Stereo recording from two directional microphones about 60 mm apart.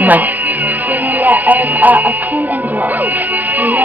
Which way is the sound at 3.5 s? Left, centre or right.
Right.